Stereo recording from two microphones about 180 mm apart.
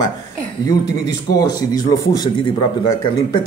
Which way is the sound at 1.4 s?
20° left (ahead or behind).